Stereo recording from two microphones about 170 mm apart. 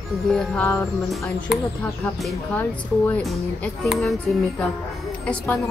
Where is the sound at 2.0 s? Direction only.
10° left (ahead or behind).